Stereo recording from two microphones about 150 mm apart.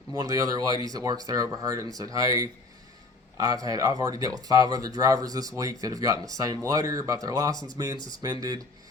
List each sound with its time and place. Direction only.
0.1 s speech: 25° right (ahead or behind)